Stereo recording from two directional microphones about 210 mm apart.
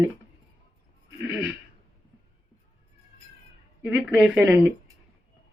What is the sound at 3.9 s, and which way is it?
Speech, 5° right (ahead or behind).